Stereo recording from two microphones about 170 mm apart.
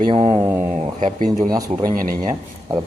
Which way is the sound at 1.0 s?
45° right (ahead or behind).